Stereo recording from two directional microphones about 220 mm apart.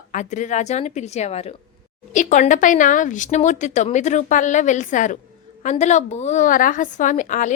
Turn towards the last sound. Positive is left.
turn(degrees=35)  # may be behind; listen again after turning